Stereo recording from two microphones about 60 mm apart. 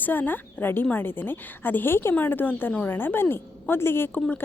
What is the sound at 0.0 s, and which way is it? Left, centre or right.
A woman's voice, left.